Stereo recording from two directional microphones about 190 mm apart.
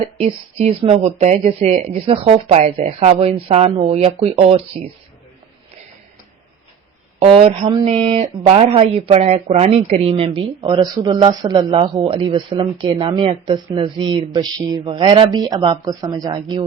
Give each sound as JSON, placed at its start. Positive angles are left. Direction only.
{"t": 0.2, "sound": "speech", "side_deg": -35}
{"t": 7.2, "sound": "speech", "side_deg": -30}